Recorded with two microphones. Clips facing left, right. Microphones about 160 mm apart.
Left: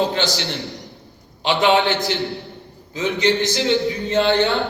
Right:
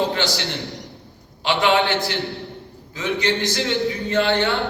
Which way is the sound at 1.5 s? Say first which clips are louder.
Left 2 dB; 20° left (ahead or behind).